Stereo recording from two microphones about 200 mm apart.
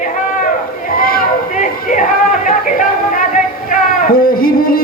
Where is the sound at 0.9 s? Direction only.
45° left (ahead or behind).